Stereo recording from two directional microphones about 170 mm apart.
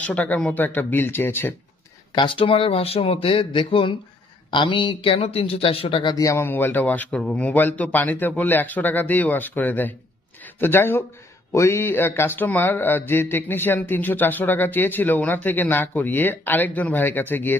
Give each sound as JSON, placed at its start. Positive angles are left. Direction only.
{"t": 0.0, "sound": "speech", "side_deg": 10}
{"t": 2.1, "sound": "speech", "side_deg": 30}
{"t": 6.1, "sound": "speech", "side_deg": 15}